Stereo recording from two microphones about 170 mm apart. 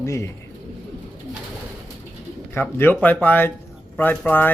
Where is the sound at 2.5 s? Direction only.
10° left (ahead or behind).